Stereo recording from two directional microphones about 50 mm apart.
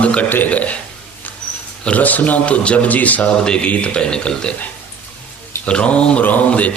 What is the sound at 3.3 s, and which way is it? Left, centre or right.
Speech, centre.